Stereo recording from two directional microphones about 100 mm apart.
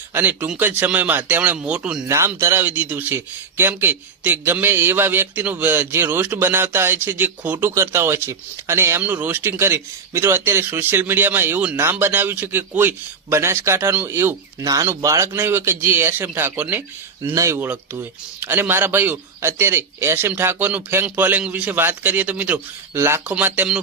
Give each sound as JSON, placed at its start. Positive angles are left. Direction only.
{"t": 0.1, "sound": "speech", "side_deg": -20}
{"t": 2.0, "sound": "speech", "side_deg": -30}
{"t": 14.6, "sound": "speech", "side_deg": -35}
{"t": 17.3, "sound": "speech", "side_deg": -30}
{"t": 17.6, "sound": "speech", "side_deg": -20}
{"t": 23.0, "sound": "speech", "side_deg": -25}